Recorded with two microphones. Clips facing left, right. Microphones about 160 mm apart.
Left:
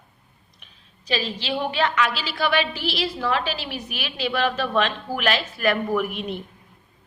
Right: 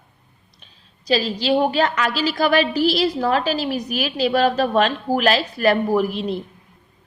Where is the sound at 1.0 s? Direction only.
35° right (ahead or behind).